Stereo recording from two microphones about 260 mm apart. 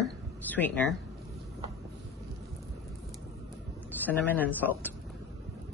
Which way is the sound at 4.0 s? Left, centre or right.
Centre.